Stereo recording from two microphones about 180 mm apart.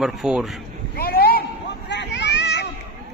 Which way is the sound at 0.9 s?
60° left (ahead or behind).